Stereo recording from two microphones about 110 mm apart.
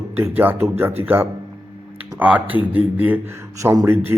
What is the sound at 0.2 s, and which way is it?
Speech, 20° right (ahead or behind).